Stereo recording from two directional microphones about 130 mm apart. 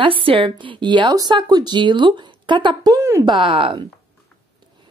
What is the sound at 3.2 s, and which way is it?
Speech, 40° right (ahead or behind).